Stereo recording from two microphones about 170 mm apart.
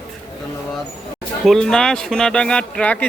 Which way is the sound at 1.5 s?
5° left (ahead or behind).